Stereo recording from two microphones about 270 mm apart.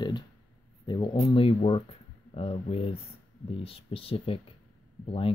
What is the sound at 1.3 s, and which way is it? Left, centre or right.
Speech, centre.